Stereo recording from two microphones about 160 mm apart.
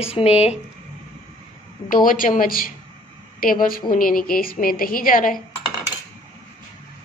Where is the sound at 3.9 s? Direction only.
60° left (ahead or behind).